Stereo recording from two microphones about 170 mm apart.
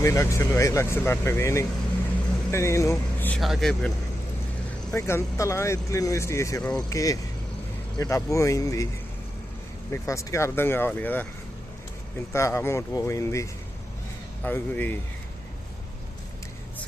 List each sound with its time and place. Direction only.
0.0 s speech: 15° left (ahead or behind); by 3.9 s centre (ahead or behind)
4.9 s speech: 15° left (ahead or behind)
9.9 s speech: 15° left (ahead or behind)
12.3 s speech: 15° left (ahead or behind)